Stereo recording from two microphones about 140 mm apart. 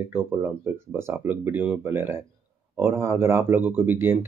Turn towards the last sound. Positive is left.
turn(degrees=-15)  # may be behind; listen again after turning